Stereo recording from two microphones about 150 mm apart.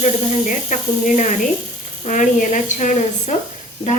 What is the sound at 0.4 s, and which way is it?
A woman's voice, 60° left (ahead or behind).